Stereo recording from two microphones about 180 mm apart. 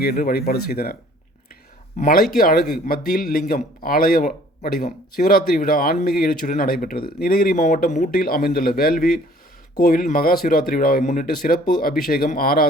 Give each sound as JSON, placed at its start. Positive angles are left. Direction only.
{"t": 0.0, "sound": "speech", "side_deg": 55}
{"t": 2.0, "sound": "speech", "side_deg": 45}